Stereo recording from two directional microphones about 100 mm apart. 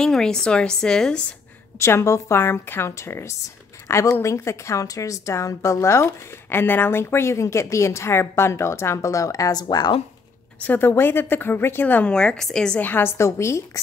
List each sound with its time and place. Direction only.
0.0 s speech: 5° left (ahead or behind)
1.8 s a woman's voice: 25° left (ahead or behind); by 9.9 s 45° left (ahead or behind)
10.6 s speech: 20° left (ahead or behind)
12.8 s a woman's voice: 20° left (ahead or behind)